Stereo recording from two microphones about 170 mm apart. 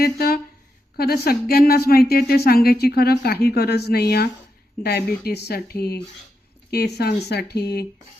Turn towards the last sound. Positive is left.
turn(degrees=70)  # may be behind; listen again after turning